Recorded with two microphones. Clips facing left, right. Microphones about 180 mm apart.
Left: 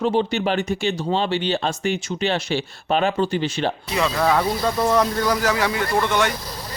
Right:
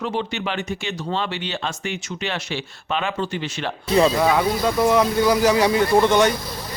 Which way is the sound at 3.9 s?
30° right (ahead or behind).